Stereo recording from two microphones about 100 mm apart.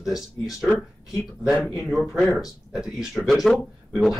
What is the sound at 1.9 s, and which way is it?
Speech, centre (ahead or behind).